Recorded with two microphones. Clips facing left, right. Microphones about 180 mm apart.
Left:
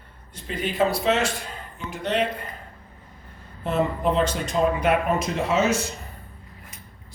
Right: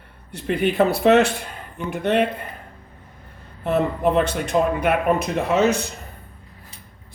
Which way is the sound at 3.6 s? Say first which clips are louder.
Right 3 dB; 60° right (ahead or behind).